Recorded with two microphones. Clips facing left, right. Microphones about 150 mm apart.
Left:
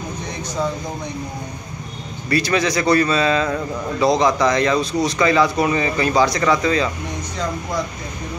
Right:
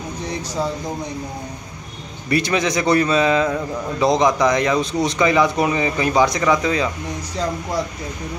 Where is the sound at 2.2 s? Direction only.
20° right (ahead or behind).